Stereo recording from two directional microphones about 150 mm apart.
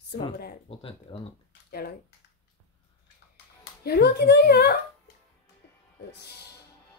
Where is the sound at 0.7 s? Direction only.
40° left (ahead or behind).